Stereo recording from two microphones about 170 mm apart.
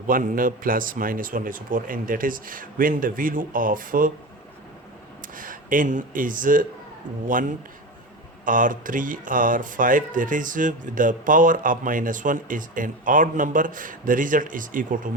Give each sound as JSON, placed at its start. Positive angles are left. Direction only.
{"t": 0.1, "sound": "a man's voice", "side_deg": -55}
{"t": 5.3, "sound": "speech", "side_deg": -55}
{"t": 8.4, "sound": "speech", "side_deg": -50}